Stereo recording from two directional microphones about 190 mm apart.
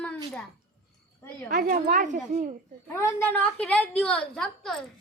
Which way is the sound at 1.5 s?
45° right (ahead or behind).